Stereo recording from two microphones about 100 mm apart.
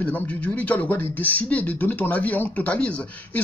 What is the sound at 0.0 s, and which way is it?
Speech, 15° left (ahead or behind).